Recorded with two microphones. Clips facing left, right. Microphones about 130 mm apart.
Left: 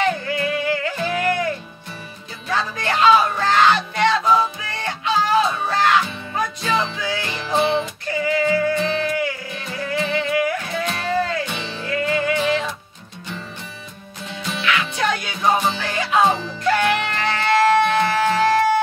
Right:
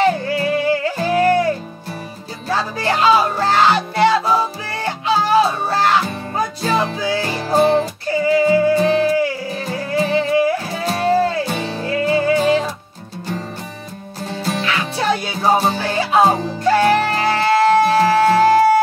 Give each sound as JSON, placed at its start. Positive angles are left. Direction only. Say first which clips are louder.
{"t": 0.0, "sound": "music", "louder": "right 5 dB", "side_deg": -35}
{"t": 11.5, "sound": "music", "louder": "right 5 dB", "side_deg": -45}
{"t": 14.2, "sound": "music", "louder": "right 3 dB", "side_deg": -40}